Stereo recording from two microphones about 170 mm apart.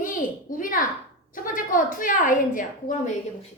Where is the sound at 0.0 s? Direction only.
50° left (ahead or behind).